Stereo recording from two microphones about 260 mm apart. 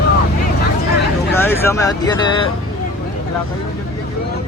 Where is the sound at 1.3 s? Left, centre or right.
Centre.